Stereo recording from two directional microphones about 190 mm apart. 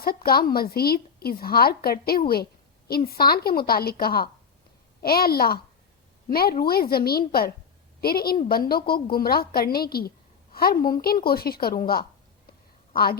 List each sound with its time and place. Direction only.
0.0 s a woman's voice: 50° left (ahead or behind)